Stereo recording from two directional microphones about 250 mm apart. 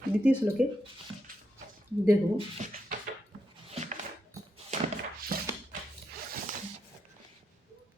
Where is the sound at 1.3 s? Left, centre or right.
Right.